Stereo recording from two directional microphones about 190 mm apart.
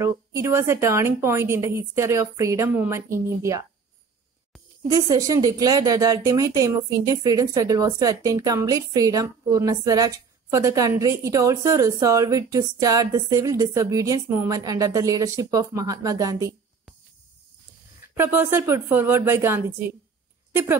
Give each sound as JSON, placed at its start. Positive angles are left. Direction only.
{"t": 0.0, "sound": "speech", "side_deg": -15}
{"t": 4.8, "sound": "speech", "side_deg": -15}
{"t": 18.1, "sound": "speech", "side_deg": -10}